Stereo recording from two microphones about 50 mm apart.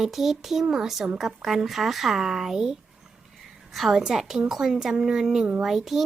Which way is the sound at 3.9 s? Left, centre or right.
Centre.